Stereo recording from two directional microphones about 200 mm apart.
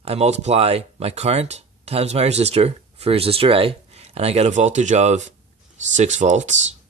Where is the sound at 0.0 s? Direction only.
30° right (ahead or behind).